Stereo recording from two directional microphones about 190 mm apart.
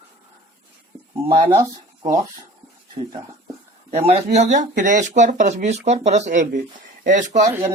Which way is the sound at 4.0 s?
35° right (ahead or behind).